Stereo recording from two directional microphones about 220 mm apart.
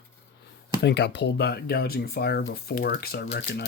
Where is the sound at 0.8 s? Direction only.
50° left (ahead or behind).